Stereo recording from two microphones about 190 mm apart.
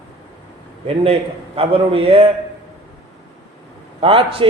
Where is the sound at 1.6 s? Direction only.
30° right (ahead or behind).